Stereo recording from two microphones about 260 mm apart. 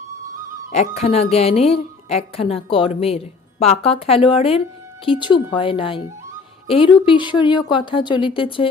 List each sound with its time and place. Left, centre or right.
0.7 s a woman's voice: left